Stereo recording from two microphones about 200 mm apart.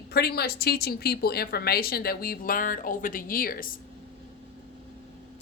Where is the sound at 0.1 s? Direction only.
50° left (ahead or behind).